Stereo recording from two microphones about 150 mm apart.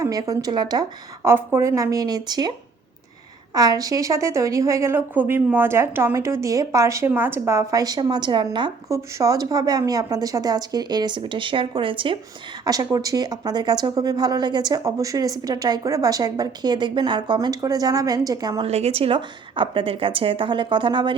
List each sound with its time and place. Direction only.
0.0 s speech: 25° right (ahead or behind)
3.5 s speech: 25° right (ahead or behind)
8.9 s speech: 20° right (ahead or behind)
12.6 s speech: 25° right (ahead or behind)
18.6 s a woman's voice: 45° right (ahead or behind)